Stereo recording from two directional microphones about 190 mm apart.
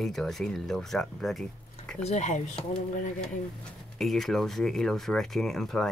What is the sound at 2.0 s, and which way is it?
Speech, 35° left (ahead or behind).